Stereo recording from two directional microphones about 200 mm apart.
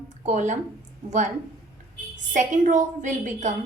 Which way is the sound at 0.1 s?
35° right (ahead or behind).